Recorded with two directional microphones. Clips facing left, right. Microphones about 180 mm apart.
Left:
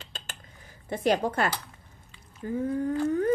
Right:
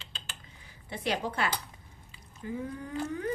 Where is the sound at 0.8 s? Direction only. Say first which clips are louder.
Left 7 dB; 45° left (ahead or behind).